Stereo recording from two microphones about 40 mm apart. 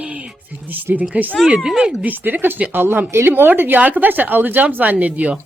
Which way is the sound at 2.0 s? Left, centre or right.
Right.